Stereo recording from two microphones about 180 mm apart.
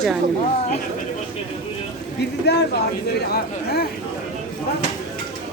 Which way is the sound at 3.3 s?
60° left (ahead or behind).